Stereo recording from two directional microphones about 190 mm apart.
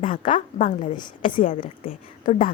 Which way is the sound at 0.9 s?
25° left (ahead or behind).